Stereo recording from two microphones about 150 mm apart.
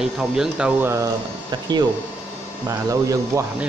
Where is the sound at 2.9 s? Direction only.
20° right (ahead or behind).